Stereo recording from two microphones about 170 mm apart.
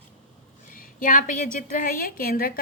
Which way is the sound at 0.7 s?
50° left (ahead or behind).